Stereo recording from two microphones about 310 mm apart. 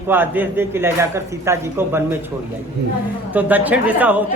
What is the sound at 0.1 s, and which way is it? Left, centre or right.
A man's voice, centre.